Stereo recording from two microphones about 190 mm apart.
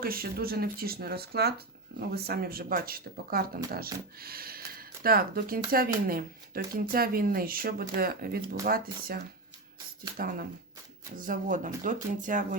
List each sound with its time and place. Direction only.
0.0 s speech: 50° right (ahead or behind)